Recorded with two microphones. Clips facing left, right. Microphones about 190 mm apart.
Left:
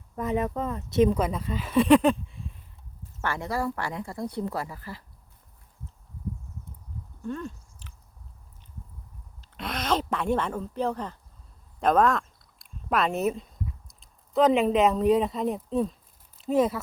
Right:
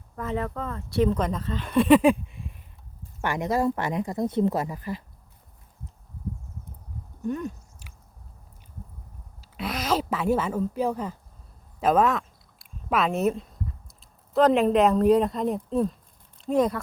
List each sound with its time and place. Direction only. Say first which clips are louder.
0.2 s speech: left 2 dB; 20° left (ahead or behind)
1.1 s speech: even; 10° left (ahead or behind); by 5.0 s 20° right (ahead or behind)
7.2 s a sound: right 4 dB; 15° right (ahead or behind)
9.4 s speech: right 2 dB; 5° right (ahead or behind)